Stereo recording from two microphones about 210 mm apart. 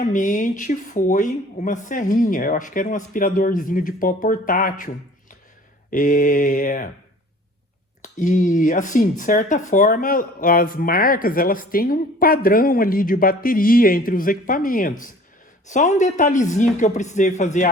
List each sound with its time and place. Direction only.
0.0 s speech: 35° left (ahead or behind)
5.9 s speech: 40° left (ahead or behind)
8.0 s speech: 35° left (ahead or behind)